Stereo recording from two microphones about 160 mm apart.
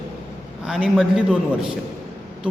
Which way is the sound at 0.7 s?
5° right (ahead or behind).